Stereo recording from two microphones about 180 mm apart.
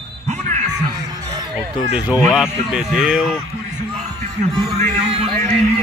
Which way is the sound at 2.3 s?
5° right (ahead or behind).